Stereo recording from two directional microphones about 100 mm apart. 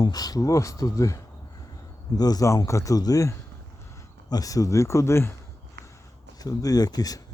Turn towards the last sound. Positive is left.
turn(degrees=40)  # may be behind; listen again after turning